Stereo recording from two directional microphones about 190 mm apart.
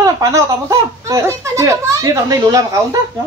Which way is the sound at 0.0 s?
15° right (ahead or behind).